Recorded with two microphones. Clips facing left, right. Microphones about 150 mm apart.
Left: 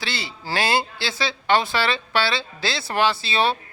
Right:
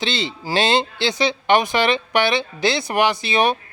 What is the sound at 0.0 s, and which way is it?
Speech, 20° right (ahead or behind).